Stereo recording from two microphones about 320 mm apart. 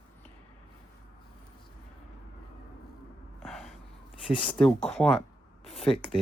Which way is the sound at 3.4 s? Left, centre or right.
Centre.